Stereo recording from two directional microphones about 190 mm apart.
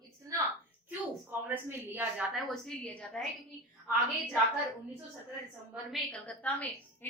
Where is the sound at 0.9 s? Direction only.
10° right (ahead or behind).